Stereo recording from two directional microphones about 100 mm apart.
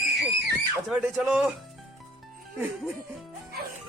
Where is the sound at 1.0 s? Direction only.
10° right (ahead or behind).